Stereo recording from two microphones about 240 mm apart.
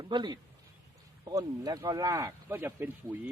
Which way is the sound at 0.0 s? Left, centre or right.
Centre.